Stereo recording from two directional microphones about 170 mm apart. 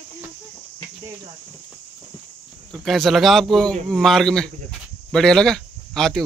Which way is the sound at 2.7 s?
Centre (ahead or behind).